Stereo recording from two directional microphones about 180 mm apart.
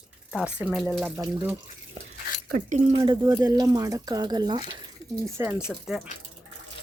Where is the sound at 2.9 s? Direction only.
25° right (ahead or behind).